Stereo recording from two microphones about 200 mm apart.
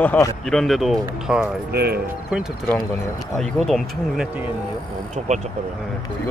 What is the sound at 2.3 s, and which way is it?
Speech, centre (ahead or behind).